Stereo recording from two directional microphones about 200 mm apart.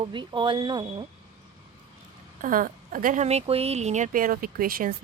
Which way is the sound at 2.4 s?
45° right (ahead or behind).